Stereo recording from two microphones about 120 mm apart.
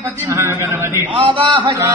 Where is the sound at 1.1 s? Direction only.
45° right (ahead or behind).